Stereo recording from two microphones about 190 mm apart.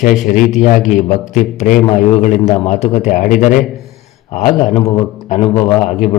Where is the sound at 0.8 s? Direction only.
Centre (ahead or behind).